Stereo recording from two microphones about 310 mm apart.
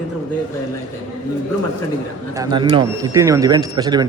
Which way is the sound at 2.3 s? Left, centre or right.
Centre.